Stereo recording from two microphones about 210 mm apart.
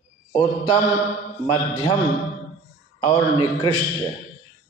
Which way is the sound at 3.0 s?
20° left (ahead or behind).